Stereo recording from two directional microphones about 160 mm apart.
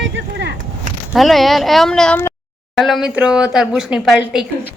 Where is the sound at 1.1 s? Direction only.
Centre (ahead or behind).